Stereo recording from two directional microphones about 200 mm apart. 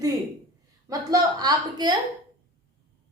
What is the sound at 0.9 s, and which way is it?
Speech, 20° right (ahead or behind).